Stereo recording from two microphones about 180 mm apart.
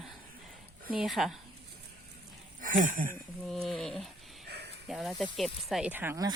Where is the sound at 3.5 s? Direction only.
Centre (ahead or behind).